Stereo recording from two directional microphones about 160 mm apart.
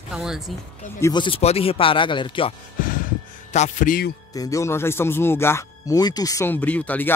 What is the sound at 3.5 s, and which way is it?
Speech, 50° left (ahead or behind).